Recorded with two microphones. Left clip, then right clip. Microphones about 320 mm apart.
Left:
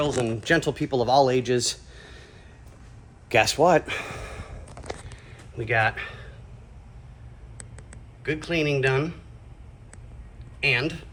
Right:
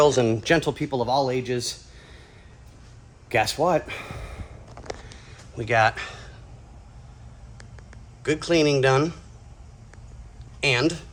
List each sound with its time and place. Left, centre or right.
0.0 s speech: right
0.4 s speech: centre
3.2 s speech: centre
5.3 s a sound: centre
8.2 s speech: centre
10.6 s speech: centre